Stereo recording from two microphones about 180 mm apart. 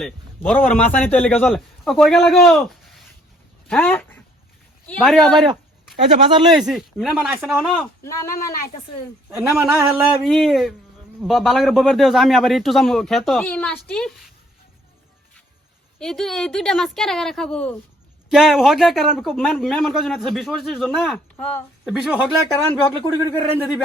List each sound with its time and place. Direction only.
0.0 s a man's voice: 5° left (ahead or behind)
6.6 s a man's voice: centre (ahead or behind)
8.0 s speech: 15° left (ahead or behind)
9.3 s a man's voice: centre (ahead or behind)
9.6 s a sound: 15° right (ahead or behind)
10.2 s a man's voice: centre (ahead or behind)
16.0 s a man's voice: centre (ahead or behind)
21.3 s a woman's voice: 10° left (ahead or behind)
22.5 s speech: 25° left (ahead or behind)